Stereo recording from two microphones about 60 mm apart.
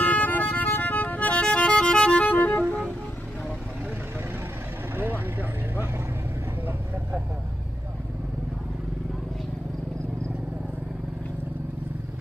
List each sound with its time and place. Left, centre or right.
0.0 s music: left
4.9 s vehicle: right